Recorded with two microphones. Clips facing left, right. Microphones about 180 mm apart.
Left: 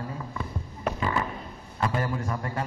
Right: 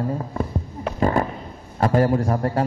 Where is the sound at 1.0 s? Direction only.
45° right (ahead or behind).